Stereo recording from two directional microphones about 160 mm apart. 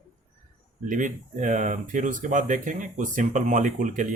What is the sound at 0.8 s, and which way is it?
Speech, 55° right (ahead or behind).